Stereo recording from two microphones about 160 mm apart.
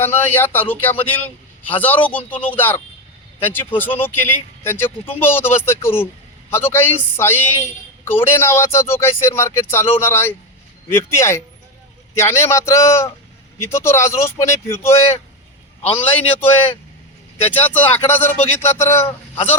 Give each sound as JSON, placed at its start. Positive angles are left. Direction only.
{"t": 0.0, "sound": "speech", "side_deg": 15}
{"t": 16.0, "sound": "speech", "side_deg": 10}